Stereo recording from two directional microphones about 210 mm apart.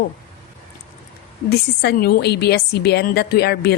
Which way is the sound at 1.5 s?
50° left (ahead or behind).